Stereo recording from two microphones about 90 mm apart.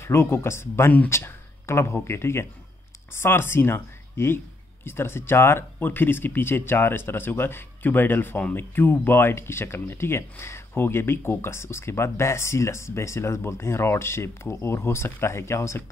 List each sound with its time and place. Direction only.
0.0 s speech: 30° left (ahead or behind)